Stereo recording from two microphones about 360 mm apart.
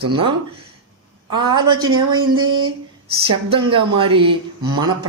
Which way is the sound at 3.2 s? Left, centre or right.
Centre.